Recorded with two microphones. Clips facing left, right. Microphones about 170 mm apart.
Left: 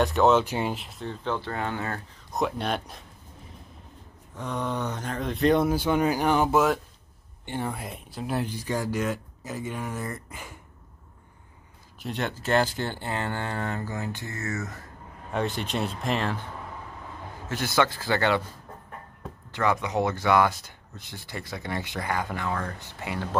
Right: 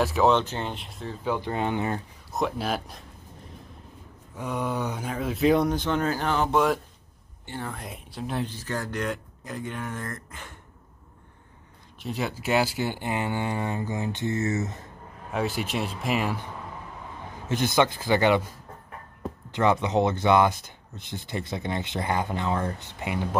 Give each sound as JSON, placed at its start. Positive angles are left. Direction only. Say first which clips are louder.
{"t": 0.0, "sound": "speech", "louder": "left 1 dB", "side_deg": 0}
{"t": 2.3, "sound": "speech", "louder": "even", "side_deg": 0}
{"t": 4.4, "sound": "speech", "louder": "right 1 dB", "side_deg": -10}
{"t": 7.4, "sound": "speech", "louder": "left 4 dB", "side_deg": 20}
{"t": 7.7, "sound": "speech", "louder": "left 1 dB", "side_deg": 0}
{"t": 12.0, "sound": "speech", "louder": "right 1 dB", "side_deg": -5}
{"t": 15.3, "sound": "speech", "louder": "even", "side_deg": -5}
{"t": 17.5, "sound": "speech", "louder": "right 2 dB", "side_deg": -20}
{"t": 19.5, "sound": "speech", "louder": "right 3 dB", "side_deg": -20}